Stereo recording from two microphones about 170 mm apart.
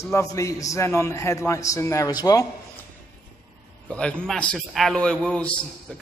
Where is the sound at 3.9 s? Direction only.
5° left (ahead or behind).